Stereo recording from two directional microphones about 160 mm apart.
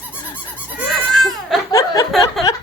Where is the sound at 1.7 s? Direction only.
20° left (ahead or behind).